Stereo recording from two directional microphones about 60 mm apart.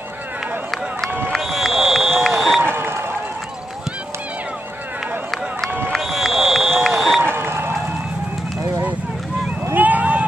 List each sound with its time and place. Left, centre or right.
1.3 s run: centre
2.6 s a sound: right
5.9 s run: centre
7.2 s crowd: right
9.8 s boat: right